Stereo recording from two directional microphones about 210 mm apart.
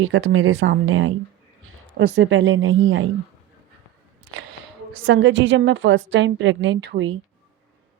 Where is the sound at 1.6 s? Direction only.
85° right.